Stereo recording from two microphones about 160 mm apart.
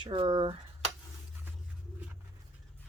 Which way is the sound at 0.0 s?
30° right (ahead or behind).